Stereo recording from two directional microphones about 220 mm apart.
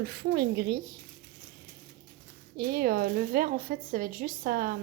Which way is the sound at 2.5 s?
40° right (ahead or behind).